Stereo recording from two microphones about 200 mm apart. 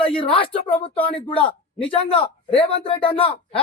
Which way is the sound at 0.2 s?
25° left (ahead or behind).